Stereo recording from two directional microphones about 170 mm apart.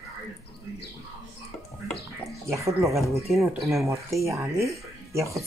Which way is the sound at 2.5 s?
15° right (ahead or behind).